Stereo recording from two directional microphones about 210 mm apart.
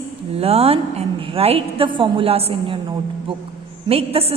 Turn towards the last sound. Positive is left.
turn(degrees=-30)  # may be behind; listen again after turning